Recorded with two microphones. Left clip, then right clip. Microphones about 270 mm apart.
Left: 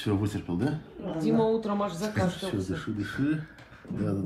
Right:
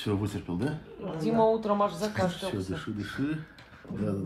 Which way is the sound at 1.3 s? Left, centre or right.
Right.